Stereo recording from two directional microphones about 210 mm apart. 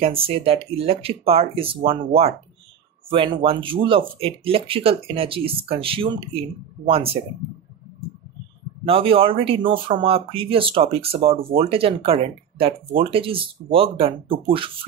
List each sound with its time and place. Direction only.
0.0 s speech: 25° right (ahead or behind)
8.8 s speech: 25° right (ahead or behind)